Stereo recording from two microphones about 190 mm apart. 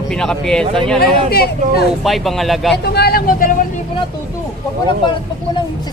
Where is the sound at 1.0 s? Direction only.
55° left (ahead or behind).